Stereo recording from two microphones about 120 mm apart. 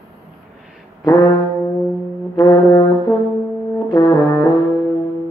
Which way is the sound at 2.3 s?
30° left (ahead or behind).